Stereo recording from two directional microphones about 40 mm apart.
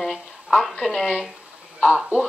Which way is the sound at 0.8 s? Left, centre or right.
Centre.